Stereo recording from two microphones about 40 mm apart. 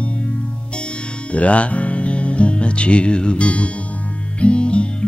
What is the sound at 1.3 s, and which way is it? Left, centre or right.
Music, left.